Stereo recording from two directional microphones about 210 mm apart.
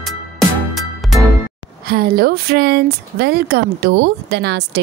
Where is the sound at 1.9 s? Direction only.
45° right (ahead or behind).